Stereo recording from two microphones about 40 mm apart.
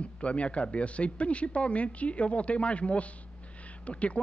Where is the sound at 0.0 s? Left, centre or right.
Left.